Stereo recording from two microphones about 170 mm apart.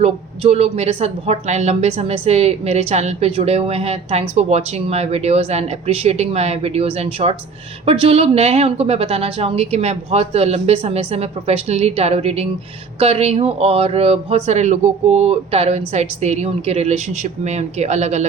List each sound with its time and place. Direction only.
0.0 s a woman's voice: 35° right (ahead or behind)